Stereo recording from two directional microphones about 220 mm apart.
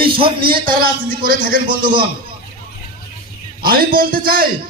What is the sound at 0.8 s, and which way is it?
Music, 40° right (ahead or behind).